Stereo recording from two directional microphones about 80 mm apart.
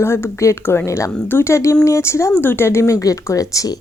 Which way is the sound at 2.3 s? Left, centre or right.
Left.